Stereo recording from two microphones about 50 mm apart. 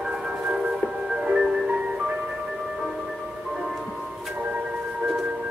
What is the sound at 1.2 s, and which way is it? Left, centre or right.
Music, centre.